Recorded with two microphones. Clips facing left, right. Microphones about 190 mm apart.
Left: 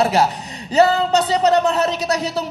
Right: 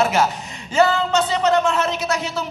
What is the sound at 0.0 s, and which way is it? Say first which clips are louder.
Speech: left 2 dB; 35° left (ahead or behind).